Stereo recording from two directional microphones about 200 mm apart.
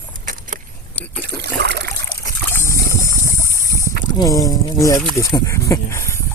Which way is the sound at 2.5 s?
15° left (ahead or behind).